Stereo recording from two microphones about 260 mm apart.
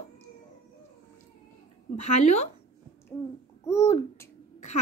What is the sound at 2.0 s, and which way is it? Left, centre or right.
Speech, left.